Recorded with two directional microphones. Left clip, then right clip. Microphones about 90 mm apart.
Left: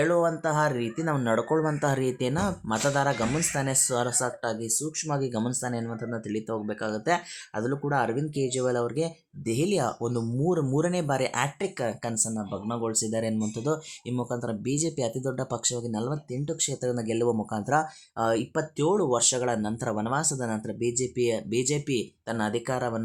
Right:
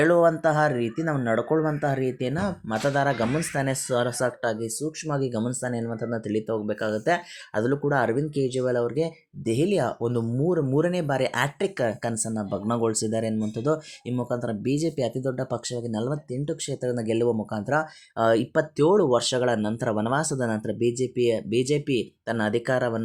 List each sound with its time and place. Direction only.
0.0 s speech: 50° right (ahead or behind)
0.5 s speech: 30° right (ahead or behind)
1.1 s speech: centre (ahead or behind)
1.8 s speech: 10° left (ahead or behind)
2.2 s speech: centre (ahead or behind)
2.8 s speech: 20° right (ahead or behind)
6.1 s speech: 30° right (ahead or behind)
6.5 s speech: 15° right (ahead or behind)
7.5 s speech: 35° right (ahead or behind)
10.4 s speech: 10° right (ahead or behind)
15.9 s speech: 30° right (ahead or behind)
17.2 s speech: 10° right (ahead or behind)
18.2 s speech: 40° right (ahead or behind)
21.0 s speech: 25° right (ahead or behind)